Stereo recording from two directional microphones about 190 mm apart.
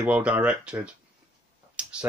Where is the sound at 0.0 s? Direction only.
5° right (ahead or behind).